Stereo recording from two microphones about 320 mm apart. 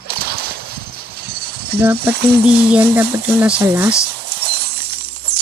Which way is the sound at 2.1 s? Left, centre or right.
Right.